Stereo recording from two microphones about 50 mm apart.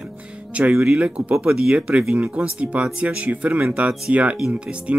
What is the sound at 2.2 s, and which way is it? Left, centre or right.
Speech, right.